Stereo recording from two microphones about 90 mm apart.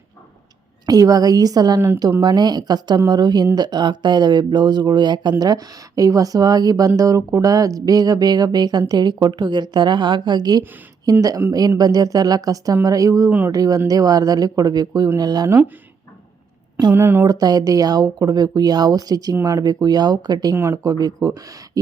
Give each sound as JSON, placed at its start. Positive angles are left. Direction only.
{"t": 0.9, "sound": "speech", "side_deg": -45}
{"t": 15.4, "sound": "speech", "side_deg": -20}
{"t": 16.9, "sound": "speech", "side_deg": -25}
{"t": 17.2, "sound": "speech", "side_deg": -45}